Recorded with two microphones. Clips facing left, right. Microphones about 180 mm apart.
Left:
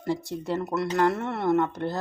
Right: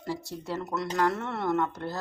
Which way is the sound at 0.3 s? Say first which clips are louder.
Left 5 dB; 15° left (ahead or behind).